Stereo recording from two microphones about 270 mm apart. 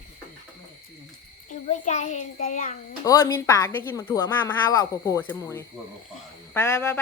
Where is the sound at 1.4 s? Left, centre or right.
Left.